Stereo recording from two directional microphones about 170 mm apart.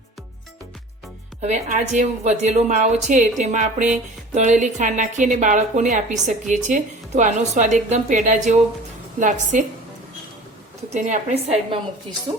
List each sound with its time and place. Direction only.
1.4 s a woman's voice: 40° right (ahead or behind)
10.9 s a woman's voice: 45° right (ahead or behind)